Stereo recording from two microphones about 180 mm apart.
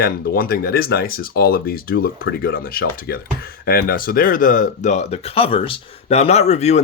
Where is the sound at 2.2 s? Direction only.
75° left (ahead or behind).